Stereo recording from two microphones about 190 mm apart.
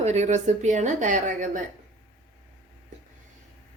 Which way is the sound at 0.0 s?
35° right (ahead or behind).